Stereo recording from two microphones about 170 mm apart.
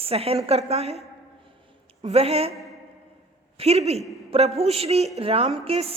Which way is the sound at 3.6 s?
40° right (ahead or behind).